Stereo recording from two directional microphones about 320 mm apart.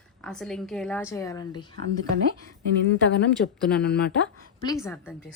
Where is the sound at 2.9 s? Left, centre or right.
Left.